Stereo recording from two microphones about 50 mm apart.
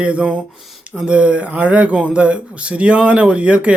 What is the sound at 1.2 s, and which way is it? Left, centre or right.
Speech, right.